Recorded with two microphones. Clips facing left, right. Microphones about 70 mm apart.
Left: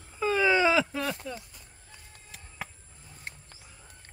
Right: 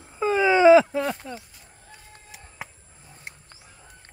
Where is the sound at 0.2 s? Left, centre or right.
Right.